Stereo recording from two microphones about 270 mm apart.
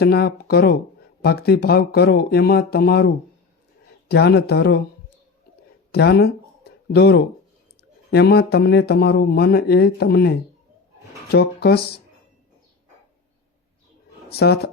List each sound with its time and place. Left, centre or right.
0.0 s speech: left
4.1 s speech: left
5.9 s a sound: left
8.1 s speech: left
14.3 s speech: left